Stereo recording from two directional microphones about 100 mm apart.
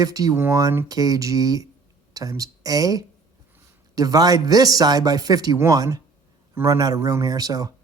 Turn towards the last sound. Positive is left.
turn(degrees=-40)  # may be behind; listen again after turning